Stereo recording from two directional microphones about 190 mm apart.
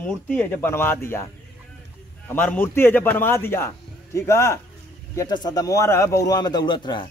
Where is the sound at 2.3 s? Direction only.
10° left (ahead or behind).